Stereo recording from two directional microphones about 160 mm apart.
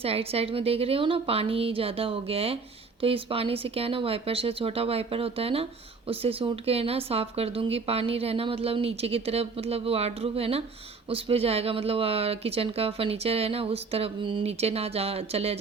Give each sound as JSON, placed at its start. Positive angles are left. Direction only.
{"t": 0.0, "sound": "speech", "side_deg": -40}